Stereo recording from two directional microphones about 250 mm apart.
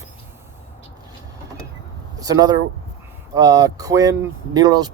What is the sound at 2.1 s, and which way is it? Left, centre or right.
Speech, centre.